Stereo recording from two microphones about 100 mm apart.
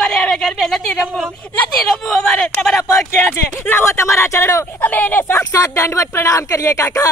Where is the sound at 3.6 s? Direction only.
25° left (ahead or behind).